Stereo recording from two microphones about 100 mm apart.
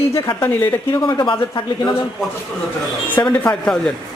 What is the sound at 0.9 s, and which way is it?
Speech, 45° left (ahead or behind).